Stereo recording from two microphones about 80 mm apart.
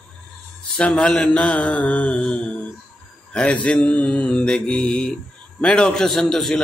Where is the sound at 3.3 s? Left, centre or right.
Centre.